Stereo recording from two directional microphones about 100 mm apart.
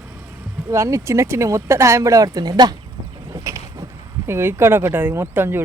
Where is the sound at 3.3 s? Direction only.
35° right (ahead or behind).